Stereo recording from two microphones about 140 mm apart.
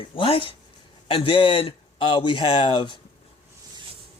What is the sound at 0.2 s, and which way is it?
Speech, 40° left (ahead or behind).